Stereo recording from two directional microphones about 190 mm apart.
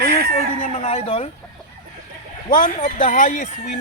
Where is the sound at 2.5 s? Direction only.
45° left (ahead or behind).